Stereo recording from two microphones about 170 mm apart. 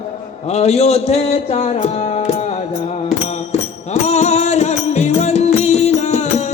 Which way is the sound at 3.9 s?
40° left (ahead or behind).